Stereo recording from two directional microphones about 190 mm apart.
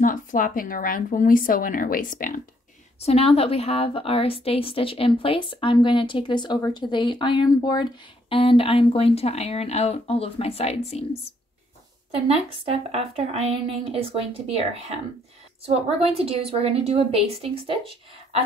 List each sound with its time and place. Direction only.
0.0 s speech: 45° left (ahead or behind)
3.0 s a woman's voice: 30° left (ahead or behind)
12.6 s a woman's voice: 30° right (ahead or behind)